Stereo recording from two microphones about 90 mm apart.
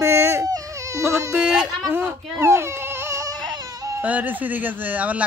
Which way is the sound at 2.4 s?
30° right (ahead or behind).